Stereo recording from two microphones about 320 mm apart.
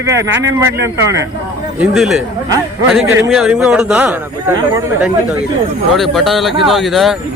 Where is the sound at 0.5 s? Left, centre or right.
Centre.